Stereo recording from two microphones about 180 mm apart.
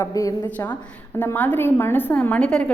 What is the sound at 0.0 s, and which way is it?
A woman's voice, 20° left (ahead or behind).